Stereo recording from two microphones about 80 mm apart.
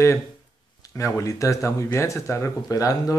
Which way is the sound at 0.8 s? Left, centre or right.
Left.